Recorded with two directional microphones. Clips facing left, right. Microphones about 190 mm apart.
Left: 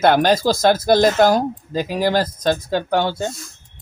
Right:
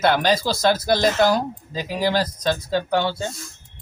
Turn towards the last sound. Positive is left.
turn(degrees=45)  # may be behind; listen again after turning